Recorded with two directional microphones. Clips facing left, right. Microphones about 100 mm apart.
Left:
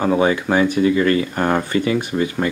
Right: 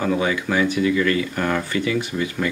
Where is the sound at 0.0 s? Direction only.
35° left (ahead or behind).